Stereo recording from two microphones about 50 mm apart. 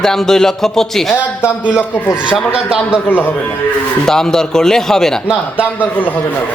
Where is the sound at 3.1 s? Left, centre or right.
Left.